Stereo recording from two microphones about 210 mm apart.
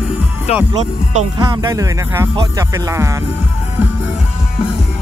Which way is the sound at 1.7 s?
15° right (ahead or behind).